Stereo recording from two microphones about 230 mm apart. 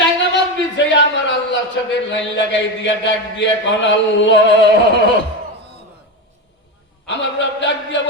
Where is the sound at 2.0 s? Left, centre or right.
Left.